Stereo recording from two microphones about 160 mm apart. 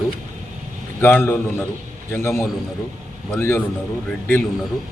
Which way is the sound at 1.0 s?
15° left (ahead or behind).